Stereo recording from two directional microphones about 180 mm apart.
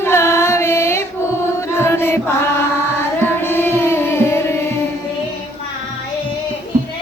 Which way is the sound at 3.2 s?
10° left (ahead or behind).